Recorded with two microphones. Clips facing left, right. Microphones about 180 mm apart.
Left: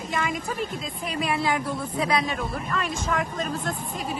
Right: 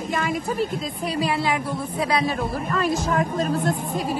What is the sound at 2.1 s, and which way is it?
Speech, 35° right (ahead or behind).